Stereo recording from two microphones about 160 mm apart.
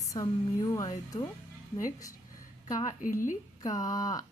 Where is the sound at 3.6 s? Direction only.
25° left (ahead or behind).